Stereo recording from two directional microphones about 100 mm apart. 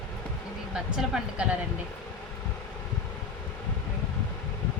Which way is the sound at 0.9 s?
5° right (ahead or behind).